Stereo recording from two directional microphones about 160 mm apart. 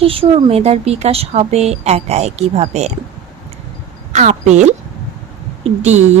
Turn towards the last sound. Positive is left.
turn(degrees=-45)  # may be behind; listen again after turning